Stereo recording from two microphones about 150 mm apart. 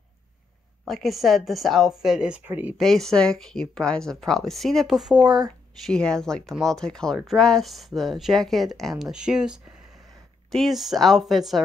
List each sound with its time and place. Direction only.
0.8 s speech: centre (ahead or behind)
2.8 s speech: centre (ahead or behind)
5.2 s speech: 25° right (ahead or behind)
5.9 s speech: 5° left (ahead or behind)